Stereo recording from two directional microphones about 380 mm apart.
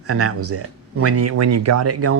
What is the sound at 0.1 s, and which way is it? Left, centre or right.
Speech, right.